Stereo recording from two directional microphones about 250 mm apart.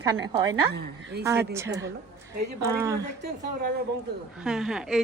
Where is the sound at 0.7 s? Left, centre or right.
Right.